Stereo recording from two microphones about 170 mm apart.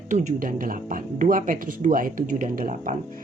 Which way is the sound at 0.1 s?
50° right (ahead or behind).